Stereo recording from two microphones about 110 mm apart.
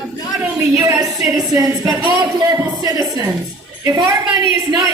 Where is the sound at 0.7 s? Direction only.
30° right (ahead or behind).